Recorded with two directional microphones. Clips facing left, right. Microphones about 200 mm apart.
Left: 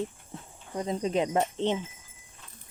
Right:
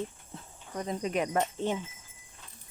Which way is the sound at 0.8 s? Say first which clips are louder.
Left 3 dB; 25° left (ahead or behind).